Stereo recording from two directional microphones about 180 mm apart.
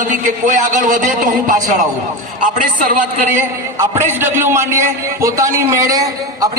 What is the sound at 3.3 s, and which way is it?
A man's voice, 15° right (ahead or behind).